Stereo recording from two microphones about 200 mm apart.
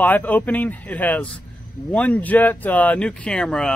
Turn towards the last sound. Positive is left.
turn(degrees=5)  # may be behind; listen again after turning